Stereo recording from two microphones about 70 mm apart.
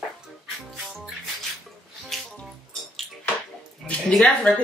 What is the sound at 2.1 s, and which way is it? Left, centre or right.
Music, centre.